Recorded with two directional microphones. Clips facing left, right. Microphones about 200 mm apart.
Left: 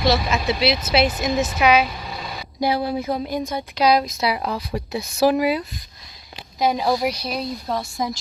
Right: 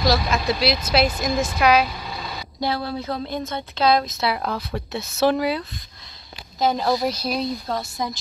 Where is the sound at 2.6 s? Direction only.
15° left (ahead or behind).